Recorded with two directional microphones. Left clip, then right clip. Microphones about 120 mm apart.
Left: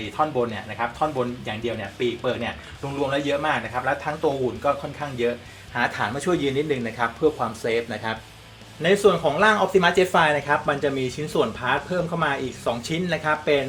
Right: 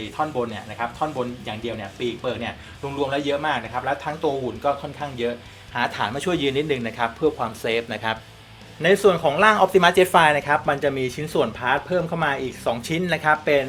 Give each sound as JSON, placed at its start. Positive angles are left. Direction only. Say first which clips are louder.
{"t": 0.2, "sound": "speech", "louder": "left 2 dB", "side_deg": -15}
{"t": 3.0, "sound": "speech", "louder": "even", "side_deg": -15}